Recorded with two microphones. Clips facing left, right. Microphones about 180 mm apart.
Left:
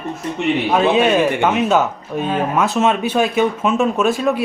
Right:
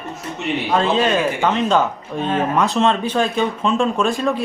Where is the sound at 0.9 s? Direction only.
10° left (ahead or behind).